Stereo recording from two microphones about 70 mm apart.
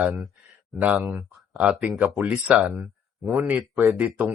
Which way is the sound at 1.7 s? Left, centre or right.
Centre.